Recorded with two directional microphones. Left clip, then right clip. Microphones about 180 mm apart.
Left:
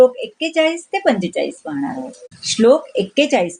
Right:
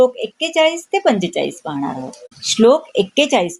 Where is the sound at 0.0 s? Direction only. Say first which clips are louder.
Left 2 dB; 35° right (ahead or behind).